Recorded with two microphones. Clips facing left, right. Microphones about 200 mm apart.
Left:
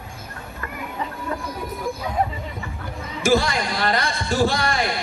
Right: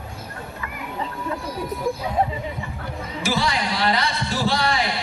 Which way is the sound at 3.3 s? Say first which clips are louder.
Left 4 dB; 50° left (ahead or behind).